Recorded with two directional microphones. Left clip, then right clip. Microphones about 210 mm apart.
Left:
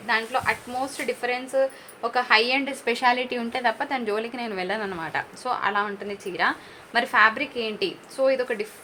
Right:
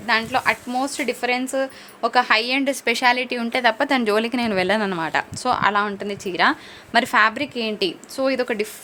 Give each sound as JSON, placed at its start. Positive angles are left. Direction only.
{"t": 0.0, "sound": "a woman's voice", "side_deg": -55}